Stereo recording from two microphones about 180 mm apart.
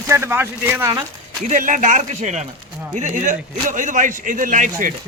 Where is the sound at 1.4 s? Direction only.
45° right (ahead or behind).